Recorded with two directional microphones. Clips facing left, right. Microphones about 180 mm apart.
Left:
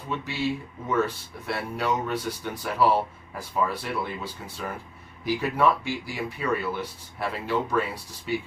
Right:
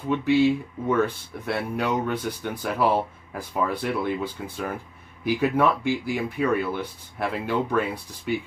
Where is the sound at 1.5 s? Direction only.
55° right (ahead or behind).